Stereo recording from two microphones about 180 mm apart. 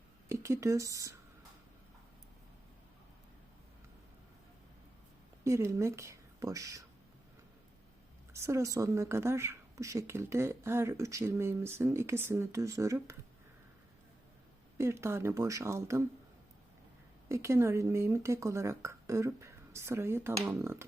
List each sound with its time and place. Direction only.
0.3 s speech: 15° right (ahead or behind)
5.4 s a woman's voice: 15° right (ahead or behind)
8.3 s speech: 15° right (ahead or behind)
14.8 s speech: 15° right (ahead or behind)
17.2 s speech: 15° right (ahead or behind)